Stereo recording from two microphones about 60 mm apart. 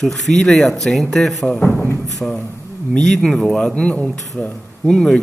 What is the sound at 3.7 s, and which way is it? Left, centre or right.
A man's voice, left.